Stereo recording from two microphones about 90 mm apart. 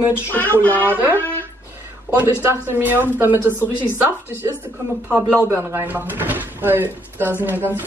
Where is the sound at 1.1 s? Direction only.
20° left (ahead or behind).